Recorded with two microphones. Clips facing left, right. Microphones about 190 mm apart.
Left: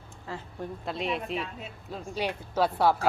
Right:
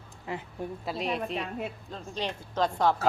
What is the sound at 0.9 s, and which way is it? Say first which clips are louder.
Speech: even; centre (ahead or behind).